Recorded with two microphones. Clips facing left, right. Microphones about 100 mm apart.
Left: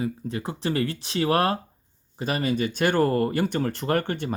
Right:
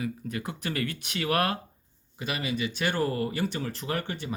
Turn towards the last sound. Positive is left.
turn(degrees=50)  # may be behind; listen again after turning